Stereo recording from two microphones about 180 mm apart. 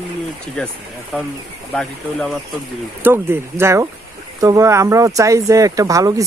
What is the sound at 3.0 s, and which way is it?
Speech, 15° right (ahead or behind).